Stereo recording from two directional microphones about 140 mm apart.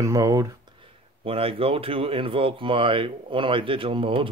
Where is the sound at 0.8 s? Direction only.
40° right (ahead or behind).